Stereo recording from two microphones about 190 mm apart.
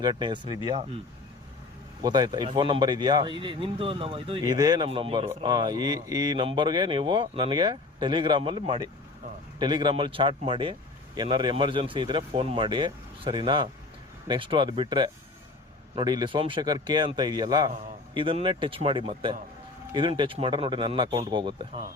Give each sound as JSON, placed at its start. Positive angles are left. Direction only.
{"t": 0.0, "sound": "a man's voice", "side_deg": -25}
{"t": 2.0, "sound": "a man's voice", "side_deg": -20}